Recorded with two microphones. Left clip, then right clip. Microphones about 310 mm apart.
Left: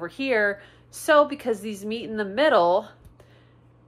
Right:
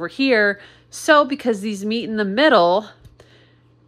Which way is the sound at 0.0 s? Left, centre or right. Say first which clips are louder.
Right 6 dB; right.